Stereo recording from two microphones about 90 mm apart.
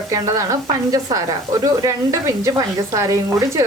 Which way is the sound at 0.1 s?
40° right (ahead or behind).